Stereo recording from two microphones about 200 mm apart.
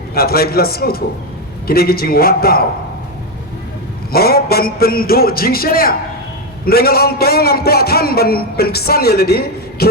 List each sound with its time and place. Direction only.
0.1 s a man's voice: 50° left (ahead or behind)
4.1 s a man's voice: 50° left (ahead or behind)